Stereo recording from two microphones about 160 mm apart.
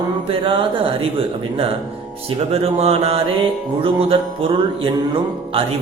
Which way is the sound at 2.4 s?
40° right (ahead or behind).